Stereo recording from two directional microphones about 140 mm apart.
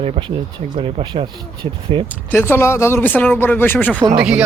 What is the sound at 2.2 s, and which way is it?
Speech, 15° left (ahead or behind).